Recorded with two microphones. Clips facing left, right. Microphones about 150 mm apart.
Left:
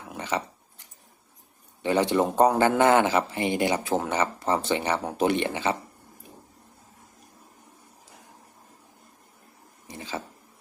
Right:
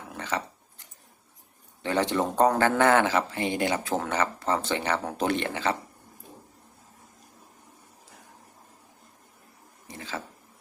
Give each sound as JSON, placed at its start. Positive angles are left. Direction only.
{"t": 0.1, "sound": "dog", "side_deg": 15}
{"t": 1.8, "sound": "speech", "side_deg": 15}
{"t": 9.8, "sound": "a sound", "side_deg": 15}